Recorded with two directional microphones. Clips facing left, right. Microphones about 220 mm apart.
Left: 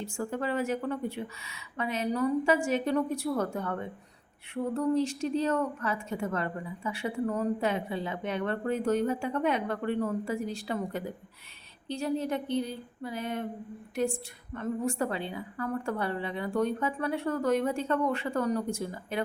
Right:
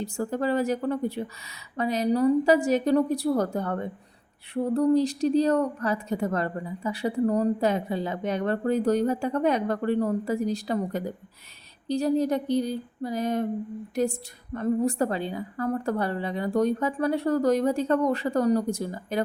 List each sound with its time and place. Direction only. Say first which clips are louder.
0.0 s speech: right 5 dB; 40° right (ahead or behind)